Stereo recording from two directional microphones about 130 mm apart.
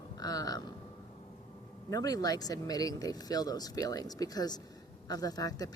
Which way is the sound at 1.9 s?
30° left (ahead or behind).